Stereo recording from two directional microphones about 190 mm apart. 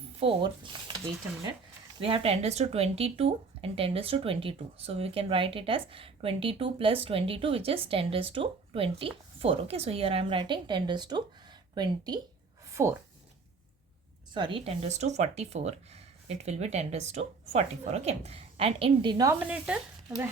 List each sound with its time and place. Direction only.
0.2 s speech: 25° right (ahead or behind)
2.0 s speech: 30° right (ahead or behind)
14.3 s speech: 25° right (ahead or behind); by 20.2 s 5° right (ahead or behind)